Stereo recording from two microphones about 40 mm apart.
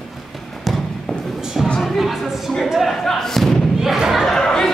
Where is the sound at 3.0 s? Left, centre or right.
Centre.